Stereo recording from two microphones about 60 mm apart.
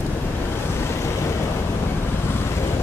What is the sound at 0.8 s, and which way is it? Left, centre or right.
Vehicle, left.